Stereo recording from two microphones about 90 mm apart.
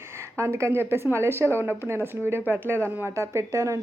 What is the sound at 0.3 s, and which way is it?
Speech, 30° right (ahead or behind).